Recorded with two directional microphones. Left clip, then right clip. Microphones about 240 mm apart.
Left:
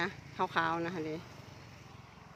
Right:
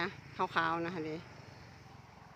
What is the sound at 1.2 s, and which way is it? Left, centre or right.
Vehicle, left.